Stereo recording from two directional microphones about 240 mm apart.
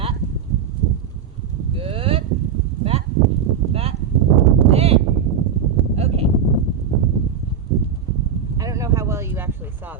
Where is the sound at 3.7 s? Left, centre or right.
Right.